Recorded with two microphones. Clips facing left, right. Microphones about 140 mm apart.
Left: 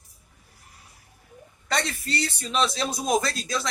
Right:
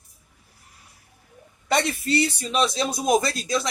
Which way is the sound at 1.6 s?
20° right (ahead or behind).